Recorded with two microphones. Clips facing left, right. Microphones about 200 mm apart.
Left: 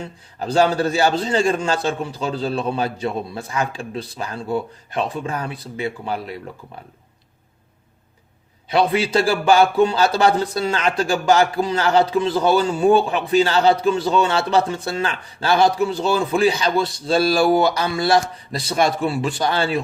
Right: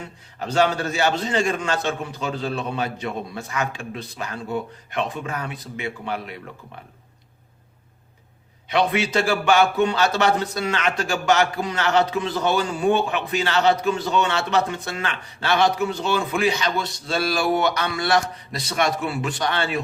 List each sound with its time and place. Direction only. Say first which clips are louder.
0.3 s a man's voice: left 3 dB; 35° left (ahead or behind)
8.7 s a man's voice: left 3 dB; 35° left (ahead or behind)